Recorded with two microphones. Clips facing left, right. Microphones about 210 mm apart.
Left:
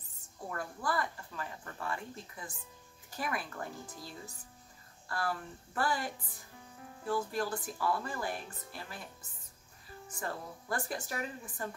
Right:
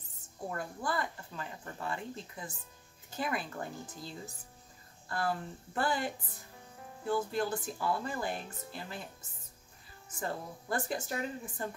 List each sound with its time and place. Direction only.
0.5 s speech: 20° right (ahead or behind)
10.2 s speech: 25° right (ahead or behind)